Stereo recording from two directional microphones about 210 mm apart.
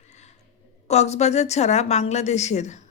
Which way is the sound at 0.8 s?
30° left (ahead or behind).